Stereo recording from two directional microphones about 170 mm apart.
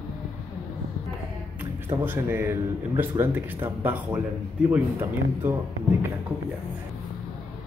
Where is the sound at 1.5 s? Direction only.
10° right (ahead or behind).